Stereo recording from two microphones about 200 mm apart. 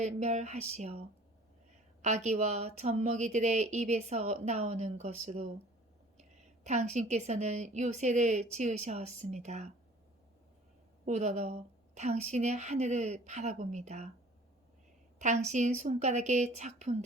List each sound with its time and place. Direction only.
0.0 s speech: 35° right (ahead or behind)
6.7 s speech: 35° right (ahead or behind)
11.0 s speech: 35° right (ahead or behind)
15.2 s speech: 35° right (ahead or behind)